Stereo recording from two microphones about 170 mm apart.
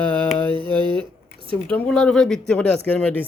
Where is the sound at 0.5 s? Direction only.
30° right (ahead or behind).